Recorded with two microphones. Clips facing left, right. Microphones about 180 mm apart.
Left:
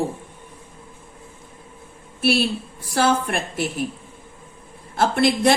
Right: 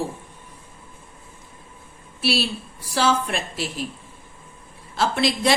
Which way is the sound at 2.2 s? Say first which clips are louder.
Left 4 dB; 50° left (ahead or behind).